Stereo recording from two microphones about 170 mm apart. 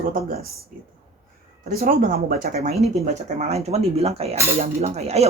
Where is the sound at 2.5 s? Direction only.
45° right (ahead or behind).